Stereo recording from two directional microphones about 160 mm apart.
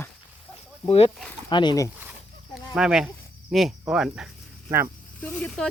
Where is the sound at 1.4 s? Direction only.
25° left (ahead or behind).